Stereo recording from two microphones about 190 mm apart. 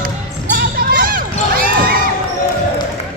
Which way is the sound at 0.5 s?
50° right (ahead or behind).